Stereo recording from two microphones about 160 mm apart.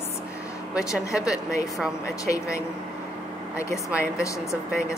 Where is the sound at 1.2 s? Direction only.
20° left (ahead or behind).